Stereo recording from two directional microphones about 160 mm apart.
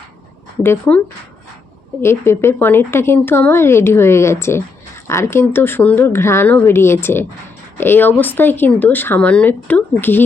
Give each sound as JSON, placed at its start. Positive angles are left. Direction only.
{"t": 0.6, "sound": "speech", "side_deg": 10}